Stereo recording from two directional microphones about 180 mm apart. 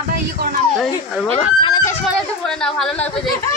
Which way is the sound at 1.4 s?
30° left (ahead or behind).